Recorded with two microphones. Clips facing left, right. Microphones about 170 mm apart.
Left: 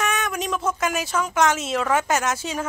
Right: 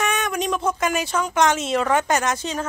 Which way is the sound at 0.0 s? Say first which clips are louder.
Right 2 dB; centre (ahead or behind).